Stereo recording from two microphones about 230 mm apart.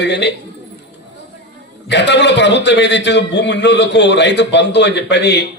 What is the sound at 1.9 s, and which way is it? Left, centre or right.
A man's voice, left.